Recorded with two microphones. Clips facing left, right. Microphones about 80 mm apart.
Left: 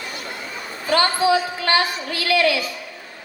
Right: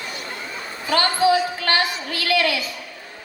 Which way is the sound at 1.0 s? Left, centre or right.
Left.